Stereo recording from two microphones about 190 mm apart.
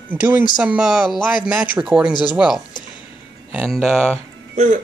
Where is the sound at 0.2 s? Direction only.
10° right (ahead or behind).